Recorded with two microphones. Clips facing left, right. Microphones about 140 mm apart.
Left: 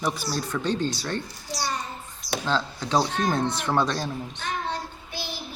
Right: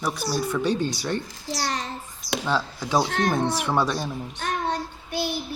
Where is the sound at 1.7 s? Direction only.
90° right.